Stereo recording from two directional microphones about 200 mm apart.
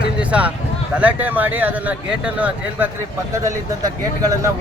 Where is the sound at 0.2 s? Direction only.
5° right (ahead or behind).